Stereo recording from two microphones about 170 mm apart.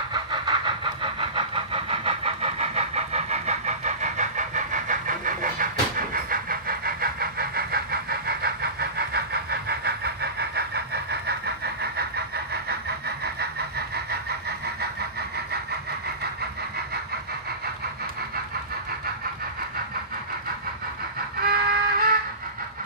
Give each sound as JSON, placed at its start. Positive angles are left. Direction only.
{"t": 0.1, "sound": "vehicle", "side_deg": -30}
{"t": 13.2, "sound": "vehicle", "side_deg": -70}
{"t": 21.5, "sound": "music", "side_deg": -65}